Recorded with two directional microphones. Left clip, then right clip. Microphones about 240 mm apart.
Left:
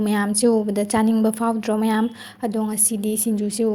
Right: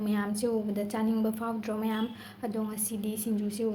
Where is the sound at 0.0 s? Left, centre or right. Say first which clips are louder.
Left 11 dB; left.